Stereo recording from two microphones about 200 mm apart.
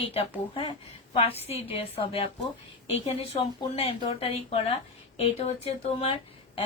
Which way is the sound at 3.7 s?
30° left (ahead or behind).